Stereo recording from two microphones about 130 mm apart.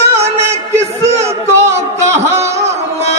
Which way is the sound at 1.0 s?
55° right (ahead or behind).